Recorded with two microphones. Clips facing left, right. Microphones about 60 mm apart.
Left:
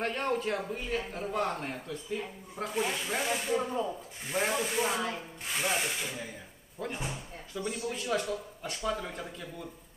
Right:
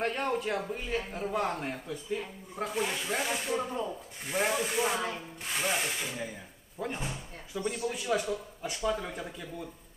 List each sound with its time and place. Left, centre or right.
0.0 s a man's voice: centre